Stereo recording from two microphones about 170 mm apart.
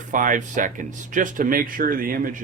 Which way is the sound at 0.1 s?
50° right (ahead or behind).